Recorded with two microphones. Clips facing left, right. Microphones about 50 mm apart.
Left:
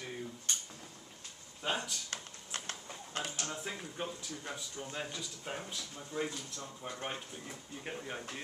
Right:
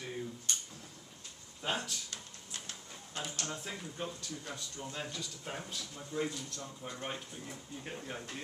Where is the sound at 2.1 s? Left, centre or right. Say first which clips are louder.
Left 4 dB; left.